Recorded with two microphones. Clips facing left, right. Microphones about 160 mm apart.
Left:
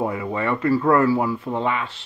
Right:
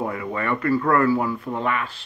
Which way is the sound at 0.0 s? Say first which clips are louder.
Left 3 dB; 20° left (ahead or behind).